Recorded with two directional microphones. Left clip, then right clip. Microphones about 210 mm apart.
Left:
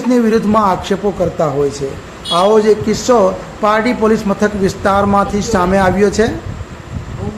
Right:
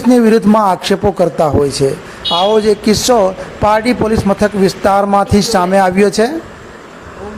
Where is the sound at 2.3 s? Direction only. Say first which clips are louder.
Left 1 dB; 35° right (ahead or behind).